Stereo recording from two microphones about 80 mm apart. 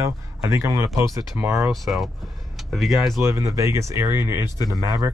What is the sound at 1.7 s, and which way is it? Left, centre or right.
Speech, centre.